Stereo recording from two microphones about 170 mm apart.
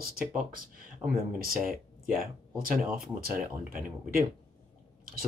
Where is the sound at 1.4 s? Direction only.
60° right (ahead or behind).